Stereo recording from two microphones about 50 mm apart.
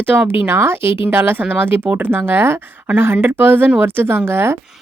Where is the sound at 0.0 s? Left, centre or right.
Right.